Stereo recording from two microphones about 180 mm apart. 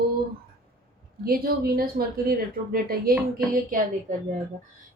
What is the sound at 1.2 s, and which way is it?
Speech, 55° right (ahead or behind).